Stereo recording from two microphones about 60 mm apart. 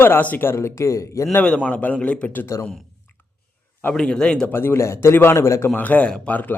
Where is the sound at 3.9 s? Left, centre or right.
Centre.